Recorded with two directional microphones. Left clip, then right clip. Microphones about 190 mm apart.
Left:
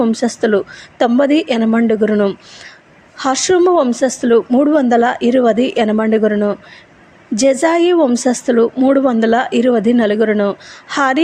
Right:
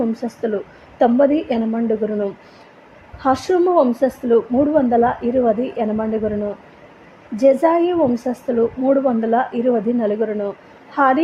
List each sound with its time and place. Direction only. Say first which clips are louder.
0.0 s a woman's voice: left 7 dB; 20° left (ahead or behind)
7.3 s a woman's voice: left 2 dB; 20° left (ahead or behind)